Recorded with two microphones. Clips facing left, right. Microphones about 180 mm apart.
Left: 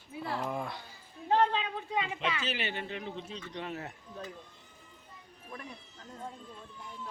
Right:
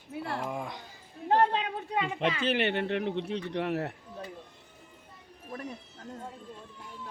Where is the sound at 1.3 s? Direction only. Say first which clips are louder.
Right 2 dB; 50° right (ahead or behind).